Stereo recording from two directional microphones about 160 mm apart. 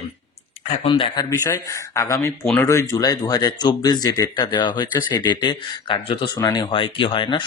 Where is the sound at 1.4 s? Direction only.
20° left (ahead or behind).